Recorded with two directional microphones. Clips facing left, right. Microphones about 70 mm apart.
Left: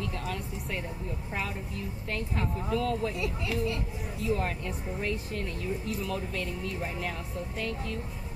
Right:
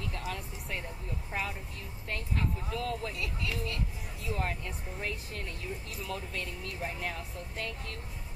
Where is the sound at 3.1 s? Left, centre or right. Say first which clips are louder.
Left 5 dB; left.